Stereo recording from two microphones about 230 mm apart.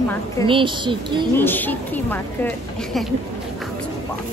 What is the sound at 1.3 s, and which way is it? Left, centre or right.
A woman's voice, centre.